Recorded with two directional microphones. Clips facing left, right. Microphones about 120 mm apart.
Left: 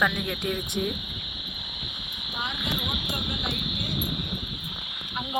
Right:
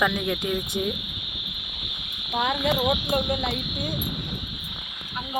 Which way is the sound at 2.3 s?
90° right.